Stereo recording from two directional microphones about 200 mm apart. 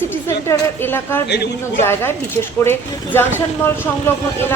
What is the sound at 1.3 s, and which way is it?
Speech, 55° left (ahead or behind).